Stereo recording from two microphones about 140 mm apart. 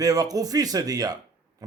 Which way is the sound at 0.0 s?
25° right (ahead or behind).